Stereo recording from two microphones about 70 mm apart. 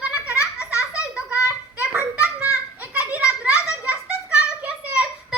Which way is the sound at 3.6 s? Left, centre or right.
Centre.